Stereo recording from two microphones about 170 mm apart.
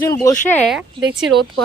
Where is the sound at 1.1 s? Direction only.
Centre (ahead or behind).